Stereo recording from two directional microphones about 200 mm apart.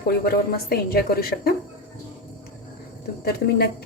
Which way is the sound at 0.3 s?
50° left (ahead or behind).